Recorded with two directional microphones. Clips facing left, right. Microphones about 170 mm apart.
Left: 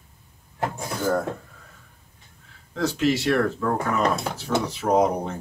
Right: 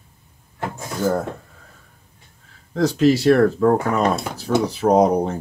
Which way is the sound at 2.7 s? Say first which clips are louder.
Right 6 dB; 40° right (ahead or behind).